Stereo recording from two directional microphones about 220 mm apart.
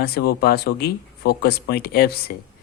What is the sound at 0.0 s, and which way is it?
Speech, 45° left (ahead or behind).